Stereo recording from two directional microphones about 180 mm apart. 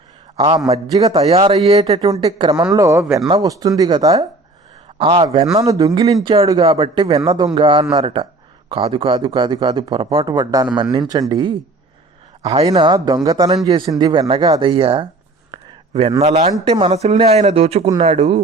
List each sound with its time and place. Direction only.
0.3 s a man's voice: 30° right (ahead or behind)
1.3 s speech: 30° right (ahead or behind)
4.9 s speech: 30° right (ahead or behind)
12.4 s speech: 35° right (ahead or behind)
15.5 s a sound: 30° right (ahead or behind)
16.2 s speech: 40° right (ahead or behind)